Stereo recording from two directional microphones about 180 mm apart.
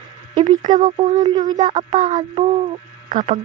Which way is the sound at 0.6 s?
45° right (ahead or behind).